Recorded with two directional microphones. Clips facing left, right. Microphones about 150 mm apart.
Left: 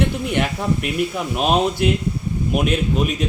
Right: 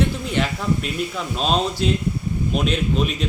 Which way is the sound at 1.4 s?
15° left (ahead or behind).